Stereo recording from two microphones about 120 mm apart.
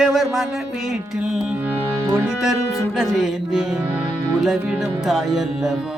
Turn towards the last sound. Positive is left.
turn(degrees=0)  # may be behind; listen again after turning